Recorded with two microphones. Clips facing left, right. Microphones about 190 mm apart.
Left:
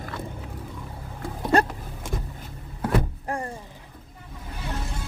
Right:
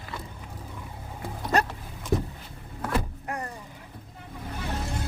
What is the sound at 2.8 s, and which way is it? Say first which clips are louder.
Power windows: left 4 dB; 30° left (ahead or behind).